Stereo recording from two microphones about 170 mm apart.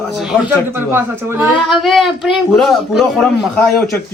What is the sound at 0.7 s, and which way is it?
Speech, 15° right (ahead or behind).